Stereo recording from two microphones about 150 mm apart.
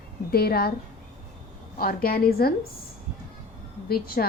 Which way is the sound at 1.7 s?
80° left.